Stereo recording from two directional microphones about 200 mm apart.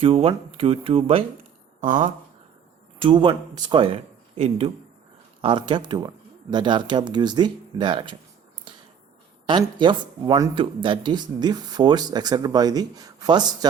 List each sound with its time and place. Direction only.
0.0 s speech: 25° right (ahead or behind)
1.8 s speech: 40° right (ahead or behind)
3.0 s speech: 25° right (ahead or behind)
9.5 s speech: 25° right (ahead or behind)